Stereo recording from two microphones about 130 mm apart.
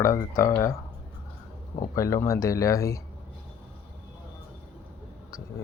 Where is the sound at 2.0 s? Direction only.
25° left (ahead or behind).